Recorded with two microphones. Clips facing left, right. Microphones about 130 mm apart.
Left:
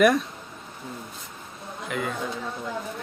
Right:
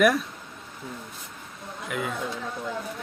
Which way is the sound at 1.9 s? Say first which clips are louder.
Left 1 dB; 5° right (ahead or behind).